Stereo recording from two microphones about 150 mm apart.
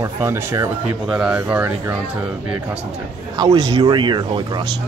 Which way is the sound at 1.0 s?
5° right (ahead or behind).